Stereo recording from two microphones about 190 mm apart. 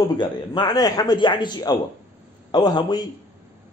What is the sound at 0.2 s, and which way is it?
Speech, 20° left (ahead or behind).